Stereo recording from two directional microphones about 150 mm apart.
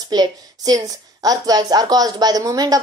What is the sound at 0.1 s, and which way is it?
A woman's voice, 25° right (ahead or behind).